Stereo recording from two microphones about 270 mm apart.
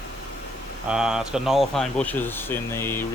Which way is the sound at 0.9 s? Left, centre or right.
Centre.